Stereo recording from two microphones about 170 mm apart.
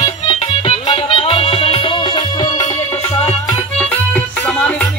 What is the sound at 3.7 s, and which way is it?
Music, 5° left (ahead or behind).